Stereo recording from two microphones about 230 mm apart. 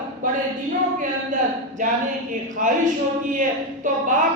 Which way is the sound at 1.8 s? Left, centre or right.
Right.